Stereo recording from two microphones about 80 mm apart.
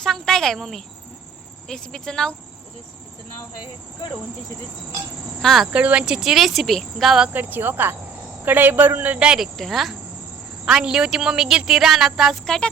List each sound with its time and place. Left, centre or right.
0.0 s cricket: centre
1.6 s speech: centre
5.4 s speech: centre
5.7 s a woman's voice: centre
7.3 s a man's voice: right
9.4 s a woman's voice: centre